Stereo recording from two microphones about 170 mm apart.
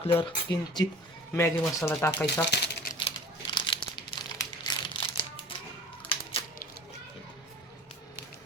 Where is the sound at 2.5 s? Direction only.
80° left.